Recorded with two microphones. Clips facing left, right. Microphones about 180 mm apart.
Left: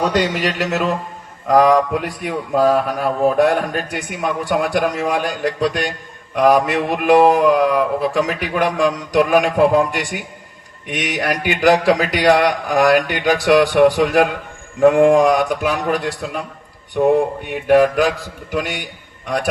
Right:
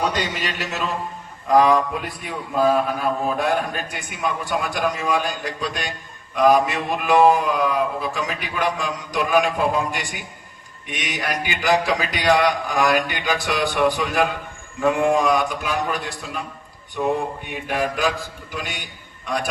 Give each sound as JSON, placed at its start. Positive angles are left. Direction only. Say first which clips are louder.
{"t": 0.1, "sound": "a man's voice", "louder": "left 8 dB", "side_deg": 75}
{"t": 17.0, "sound": "mantra", "louder": "left 8 dB", "side_deg": 60}
{"t": 18.5, "sound": "a man's voice", "louder": "left 10 dB", "side_deg": 70}